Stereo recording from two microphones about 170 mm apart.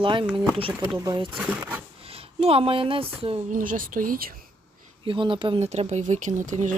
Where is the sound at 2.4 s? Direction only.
35° right (ahead or behind).